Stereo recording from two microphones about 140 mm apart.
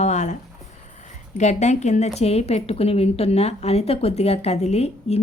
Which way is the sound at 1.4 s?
55° left (ahead or behind).